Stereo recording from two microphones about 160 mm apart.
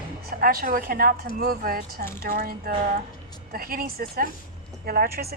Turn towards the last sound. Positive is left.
turn(degrees=-75)  # may be behind; listen again after turning